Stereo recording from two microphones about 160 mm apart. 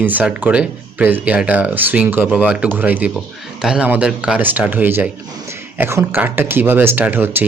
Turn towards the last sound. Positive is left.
turn(degrees=-10)  # may be behind; listen again after turning